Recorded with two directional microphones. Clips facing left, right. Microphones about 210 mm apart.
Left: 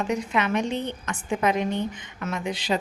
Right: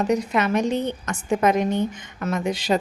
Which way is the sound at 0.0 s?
40° right (ahead or behind).